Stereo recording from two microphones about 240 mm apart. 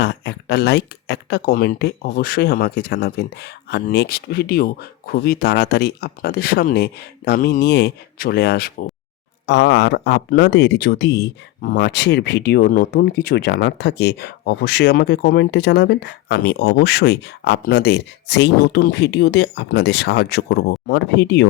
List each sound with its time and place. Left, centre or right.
0.0 s speech: left